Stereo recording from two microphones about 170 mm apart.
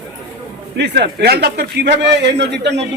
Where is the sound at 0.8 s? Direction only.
85° right.